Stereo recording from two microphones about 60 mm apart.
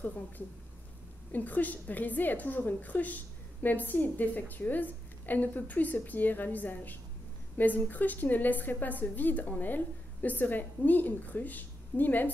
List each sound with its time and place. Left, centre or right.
1.3 s a woman's voice: left